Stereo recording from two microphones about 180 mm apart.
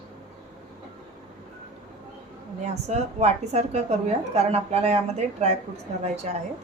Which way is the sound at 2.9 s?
35° right (ahead or behind).